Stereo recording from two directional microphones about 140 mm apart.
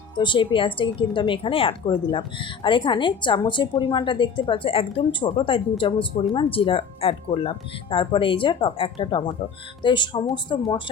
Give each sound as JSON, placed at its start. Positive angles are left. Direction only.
{"t": 0.2, "sound": "a woman's voice", "side_deg": 35}